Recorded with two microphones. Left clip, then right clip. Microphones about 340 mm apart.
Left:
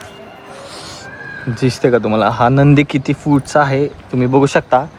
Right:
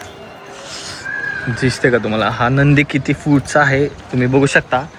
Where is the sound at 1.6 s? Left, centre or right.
Centre.